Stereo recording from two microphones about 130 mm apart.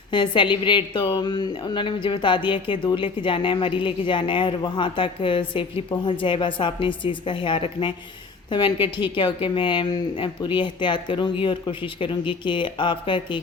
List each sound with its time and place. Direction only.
0.1 s speech: 40° left (ahead or behind)